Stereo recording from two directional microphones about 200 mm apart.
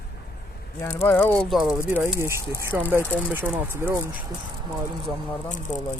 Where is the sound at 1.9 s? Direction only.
10° right (ahead or behind).